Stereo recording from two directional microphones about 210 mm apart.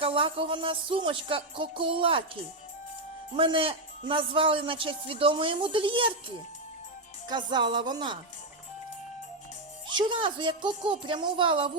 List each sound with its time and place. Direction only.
0.0 s a man's voice: 25° right (ahead or behind)
7.3 s a man's voice: 20° right (ahead or behind)
9.9 s a man's voice: 25° right (ahead or behind)